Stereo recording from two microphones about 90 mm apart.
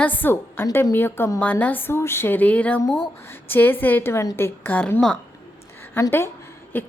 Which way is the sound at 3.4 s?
20° left (ahead or behind).